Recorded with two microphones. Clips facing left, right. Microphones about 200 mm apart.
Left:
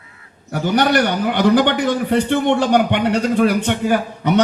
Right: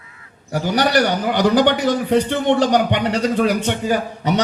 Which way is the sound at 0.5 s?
55° left (ahead or behind).